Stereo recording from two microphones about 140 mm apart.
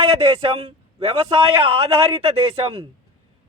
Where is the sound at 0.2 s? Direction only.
45° right (ahead or behind).